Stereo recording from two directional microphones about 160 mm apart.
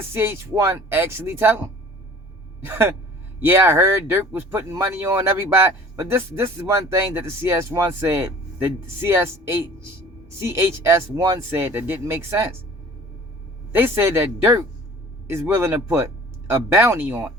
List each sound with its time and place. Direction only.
0.1 s speech: 15° right (ahead or behind)
13.7 s speech: 15° right (ahead or behind)